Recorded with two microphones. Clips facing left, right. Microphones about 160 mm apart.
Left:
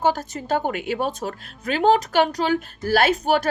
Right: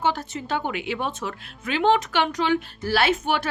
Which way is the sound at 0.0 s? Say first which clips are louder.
Left 3 dB; 40° left (ahead or behind).